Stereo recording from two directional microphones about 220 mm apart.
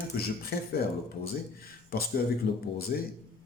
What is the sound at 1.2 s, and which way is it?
Speech, 45° left (ahead or behind).